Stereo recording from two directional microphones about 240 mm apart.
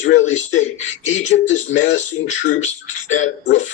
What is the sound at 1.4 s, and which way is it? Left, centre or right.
Speech, left.